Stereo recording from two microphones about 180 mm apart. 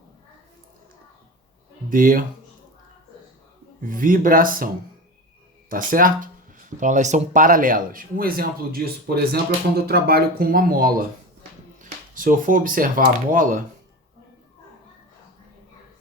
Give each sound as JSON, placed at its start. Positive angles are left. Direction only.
{"t": 1.9, "sound": "speech", "side_deg": -50}
{"t": 3.8, "sound": "speech", "side_deg": -50}
{"t": 11.8, "sound": "a sound", "side_deg": -50}
{"t": 13.3, "sound": "speech", "side_deg": -50}